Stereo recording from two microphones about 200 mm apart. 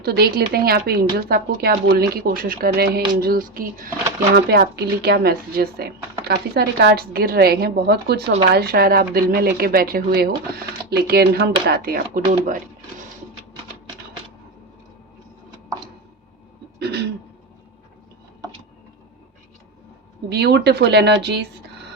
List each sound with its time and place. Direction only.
0.0 s speech: 50° right (ahead or behind)
16.8 s speech: 55° right (ahead or behind)
20.3 s speech: 55° right (ahead or behind)